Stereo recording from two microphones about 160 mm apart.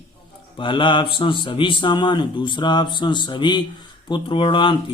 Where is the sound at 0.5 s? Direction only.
30° left (ahead or behind).